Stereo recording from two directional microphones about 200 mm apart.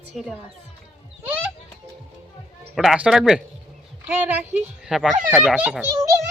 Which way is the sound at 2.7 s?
5° right (ahead or behind).